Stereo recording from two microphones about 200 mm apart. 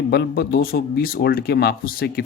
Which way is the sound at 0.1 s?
50° left (ahead or behind).